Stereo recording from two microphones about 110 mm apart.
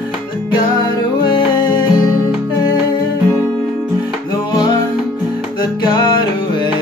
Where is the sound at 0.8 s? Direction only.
45° left (ahead or behind).